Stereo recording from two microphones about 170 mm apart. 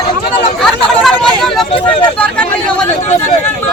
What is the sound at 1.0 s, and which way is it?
Vehicle, centre (ahead or behind).